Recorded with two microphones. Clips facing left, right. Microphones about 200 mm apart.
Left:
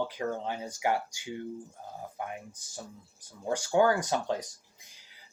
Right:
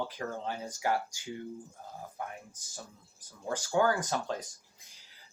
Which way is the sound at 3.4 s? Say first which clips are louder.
Left 3 dB; 15° left (ahead or behind).